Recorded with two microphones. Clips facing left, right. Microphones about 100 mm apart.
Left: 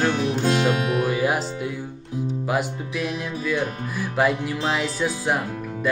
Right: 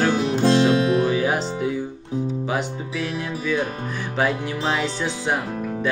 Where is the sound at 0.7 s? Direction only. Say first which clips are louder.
Right 5 dB; 30° right (ahead or behind).